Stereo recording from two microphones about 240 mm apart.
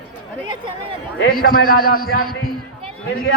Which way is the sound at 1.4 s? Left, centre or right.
Left.